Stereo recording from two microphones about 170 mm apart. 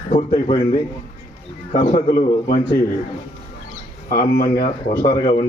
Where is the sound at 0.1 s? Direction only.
30° left (ahead or behind).